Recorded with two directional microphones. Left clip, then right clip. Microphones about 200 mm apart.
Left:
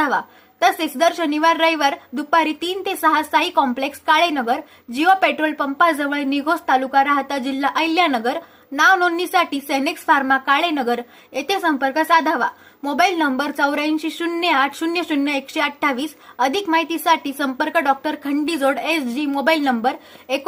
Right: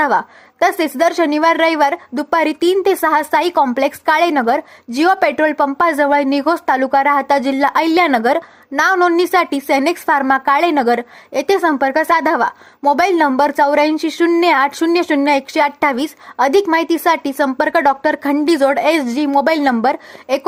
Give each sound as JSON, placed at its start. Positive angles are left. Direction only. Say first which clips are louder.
{"t": 0.0, "sound": "a woman's voice", "louder": "right 5 dB", "side_deg": -45}